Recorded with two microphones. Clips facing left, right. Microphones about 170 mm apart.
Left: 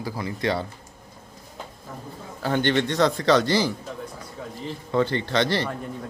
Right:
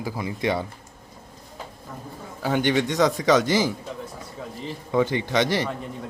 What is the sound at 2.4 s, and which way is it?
A man's voice, 10° right (ahead or behind).